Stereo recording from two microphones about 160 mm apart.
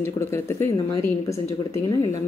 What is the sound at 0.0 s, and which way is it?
Speech, 15° left (ahead or behind).